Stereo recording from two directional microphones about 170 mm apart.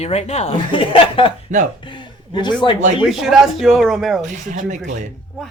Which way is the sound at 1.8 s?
30° left (ahead or behind).